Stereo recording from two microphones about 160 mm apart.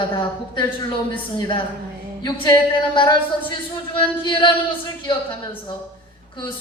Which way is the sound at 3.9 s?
30° left (ahead or behind).